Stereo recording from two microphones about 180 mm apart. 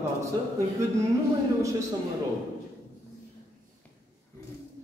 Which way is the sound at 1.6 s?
15° right (ahead or behind).